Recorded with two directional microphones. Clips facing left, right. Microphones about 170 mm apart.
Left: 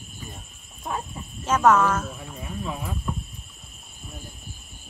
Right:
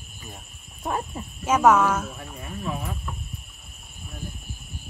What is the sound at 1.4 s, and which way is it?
Speech, 10° right (ahead or behind).